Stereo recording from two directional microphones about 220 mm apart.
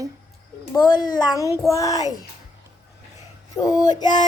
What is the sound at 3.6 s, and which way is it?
Child singing, 15° left (ahead or behind).